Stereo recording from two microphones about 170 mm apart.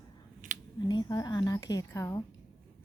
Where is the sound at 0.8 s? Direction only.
25° left (ahead or behind).